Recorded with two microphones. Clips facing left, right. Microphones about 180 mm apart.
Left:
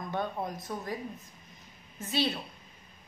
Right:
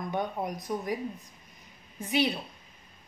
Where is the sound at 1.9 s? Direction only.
15° right (ahead or behind).